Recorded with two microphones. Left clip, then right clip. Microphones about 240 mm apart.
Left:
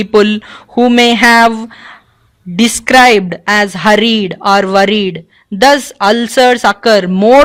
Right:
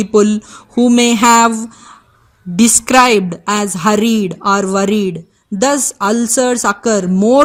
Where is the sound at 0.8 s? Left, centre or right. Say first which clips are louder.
Left 4 dB; left.